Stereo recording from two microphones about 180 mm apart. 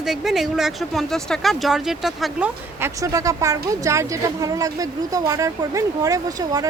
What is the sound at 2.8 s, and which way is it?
Speech, 20° right (ahead or behind).